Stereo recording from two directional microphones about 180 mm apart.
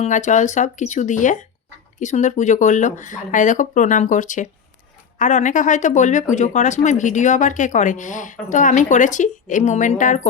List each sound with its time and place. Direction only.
0.0 s speech: 40° left (ahead or behind)